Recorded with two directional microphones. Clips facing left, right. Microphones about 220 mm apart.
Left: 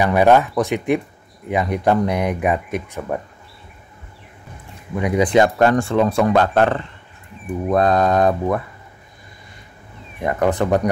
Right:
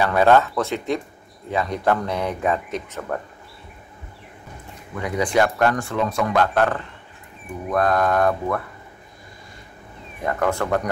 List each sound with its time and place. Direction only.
0.0 s speech: 15° left (ahead or behind)
4.9 s speech: 20° left (ahead or behind)
10.2 s speech: 20° left (ahead or behind)